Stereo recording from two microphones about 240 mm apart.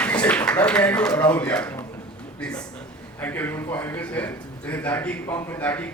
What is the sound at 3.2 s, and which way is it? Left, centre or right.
A man's voice, centre.